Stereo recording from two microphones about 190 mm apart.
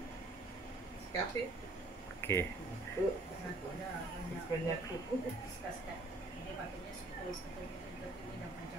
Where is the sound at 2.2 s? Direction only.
10° left (ahead or behind).